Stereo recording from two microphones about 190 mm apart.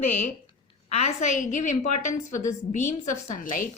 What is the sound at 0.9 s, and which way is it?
A woman's voice, 35° left (ahead or behind).